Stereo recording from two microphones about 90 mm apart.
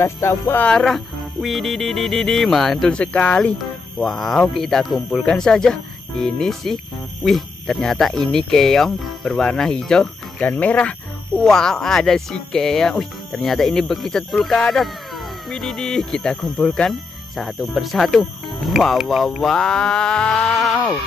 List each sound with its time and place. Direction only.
0.0 s speech: 30° left (ahead or behind)
0.7 s speech: 5° left (ahead or behind)
4.0 s speech: centre (ahead or behind)
17.4 s speech: centre (ahead or behind)